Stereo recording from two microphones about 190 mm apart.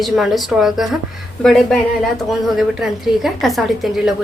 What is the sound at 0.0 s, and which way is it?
A woman's voice, centre (ahead or behind).